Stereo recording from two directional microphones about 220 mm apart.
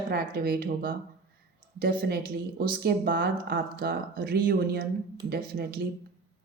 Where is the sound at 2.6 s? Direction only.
45° right (ahead or behind).